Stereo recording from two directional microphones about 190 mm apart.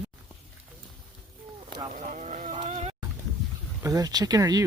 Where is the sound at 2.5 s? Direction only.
30° right (ahead or behind).